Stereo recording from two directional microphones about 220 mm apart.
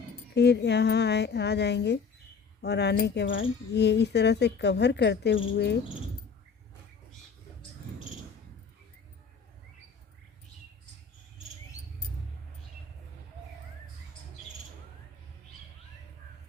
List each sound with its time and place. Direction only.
0.3 s speech: 50° left (ahead or behind)